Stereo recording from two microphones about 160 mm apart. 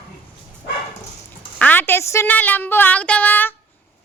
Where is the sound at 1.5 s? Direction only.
10° left (ahead or behind).